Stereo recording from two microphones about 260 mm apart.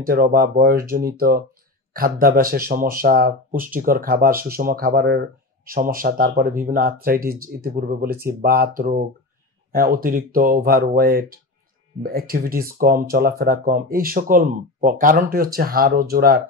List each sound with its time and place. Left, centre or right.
0.0 s speech: right